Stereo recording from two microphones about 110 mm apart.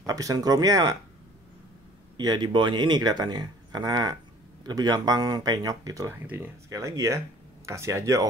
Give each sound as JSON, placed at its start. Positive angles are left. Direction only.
{"t": 0.0, "sound": "speech", "side_deg": -30}
{"t": 2.1, "sound": "speech", "side_deg": -40}
{"t": 6.1, "sound": "speech", "side_deg": -20}
{"t": 6.7, "sound": "speech", "side_deg": -30}